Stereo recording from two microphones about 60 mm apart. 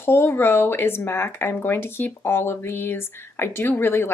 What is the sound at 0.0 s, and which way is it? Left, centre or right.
Speech, left.